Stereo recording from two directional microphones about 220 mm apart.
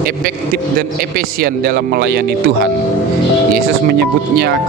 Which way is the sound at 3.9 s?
45° right (ahead or behind).